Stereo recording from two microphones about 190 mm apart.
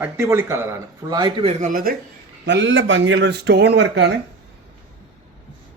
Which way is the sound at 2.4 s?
70° right (ahead or behind).